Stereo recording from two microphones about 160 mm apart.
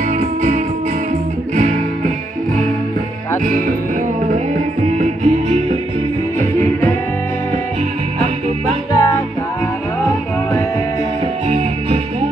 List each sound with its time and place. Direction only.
0.1 s music: 50° right (ahead or behind)
3.4 s music: 55° right (ahead or behind)
4.9 s music: 45° right (ahead or behind)
8.9 s music: 20° left (ahead or behind)
11.4 s music: 40° right (ahead or behind)